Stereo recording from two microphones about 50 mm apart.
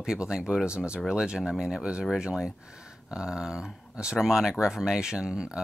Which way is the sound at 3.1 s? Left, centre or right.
Centre.